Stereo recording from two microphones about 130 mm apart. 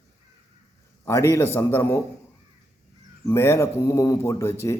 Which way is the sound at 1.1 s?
20° left (ahead or behind).